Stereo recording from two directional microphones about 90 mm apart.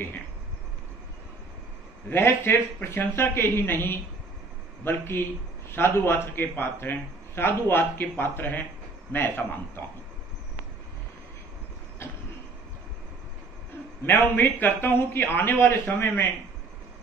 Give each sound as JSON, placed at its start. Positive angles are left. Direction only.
{"t": 2.0, "sound": "a man's voice", "side_deg": 25}
{"t": 14.0, "sound": "a man's voice", "side_deg": 20}